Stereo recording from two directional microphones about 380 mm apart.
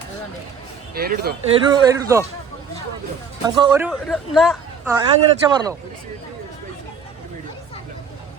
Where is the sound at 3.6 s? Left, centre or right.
Centre.